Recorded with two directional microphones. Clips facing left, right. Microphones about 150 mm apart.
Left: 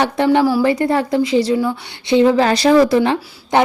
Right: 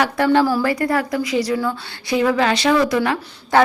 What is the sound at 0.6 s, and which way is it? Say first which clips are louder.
A woman's voice: left 4 dB; 25° left (ahead or behind).